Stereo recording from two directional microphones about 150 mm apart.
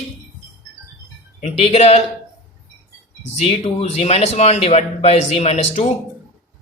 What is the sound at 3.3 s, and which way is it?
Speech, 45° left (ahead or behind).